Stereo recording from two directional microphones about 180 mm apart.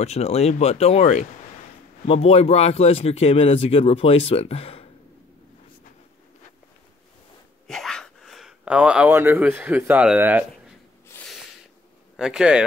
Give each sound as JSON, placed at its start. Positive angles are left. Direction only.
{"t": 0.0, "sound": "a man's voice", "side_deg": 35}
{"t": 7.6, "sound": "speech", "side_deg": 0}
{"t": 11.1, "sound": "a sound", "side_deg": 5}
{"t": 12.2, "sound": "speech", "side_deg": -5}